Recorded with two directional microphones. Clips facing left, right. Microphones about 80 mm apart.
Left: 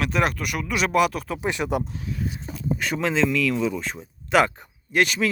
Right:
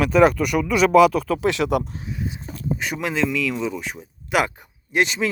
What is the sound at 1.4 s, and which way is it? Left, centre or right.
Speech, right.